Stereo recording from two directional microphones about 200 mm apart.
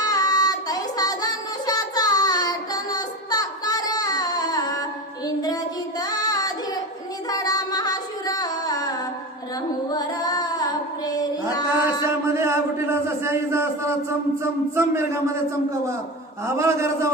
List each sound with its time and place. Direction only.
0.0 s child singing: 20° left (ahead or behind)
6.0 s child singing: 20° left (ahead or behind)
7.3 s music: 20° left (ahead or behind)
9.9 s female singing: 20° left (ahead or behind)
12.0 s a sound: 15° right (ahead or behind)
16.6 s a man's voice: 15° right (ahead or behind)